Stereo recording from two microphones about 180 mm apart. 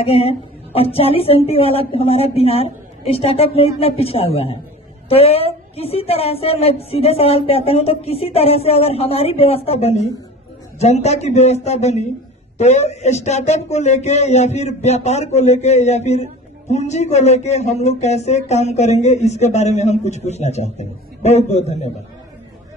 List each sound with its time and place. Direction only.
0.0 s speech: 35° left (ahead or behind)